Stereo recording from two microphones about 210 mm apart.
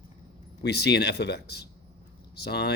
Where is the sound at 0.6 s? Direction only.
50° left (ahead or behind).